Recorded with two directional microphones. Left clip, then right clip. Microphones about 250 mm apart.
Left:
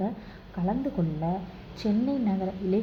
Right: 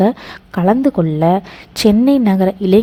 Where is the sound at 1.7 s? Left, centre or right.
Right.